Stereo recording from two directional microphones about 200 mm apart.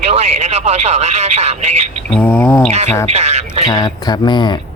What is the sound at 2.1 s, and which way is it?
Speech, 10° left (ahead or behind).